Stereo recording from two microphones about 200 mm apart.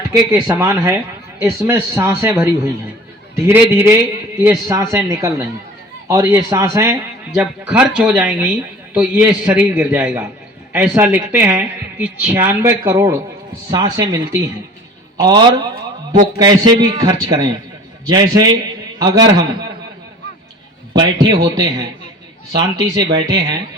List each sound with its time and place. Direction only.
0.3 s speech: 15° right (ahead or behind)
3.4 s speech: 10° right (ahead or behind)
15.2 s speech: 20° right (ahead or behind)
20.9 s speech: 20° right (ahead or behind)